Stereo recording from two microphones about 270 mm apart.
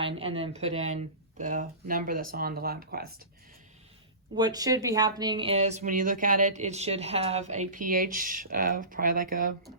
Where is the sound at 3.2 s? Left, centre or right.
Right.